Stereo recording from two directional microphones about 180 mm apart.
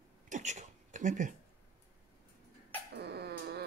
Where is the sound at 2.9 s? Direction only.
65° right (ahead or behind).